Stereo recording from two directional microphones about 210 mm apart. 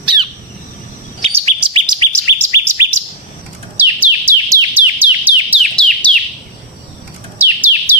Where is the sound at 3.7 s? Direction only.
10° right (ahead or behind).